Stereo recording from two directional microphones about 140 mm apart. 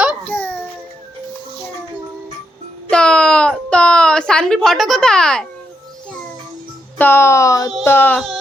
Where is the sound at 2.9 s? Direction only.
5° left (ahead or behind).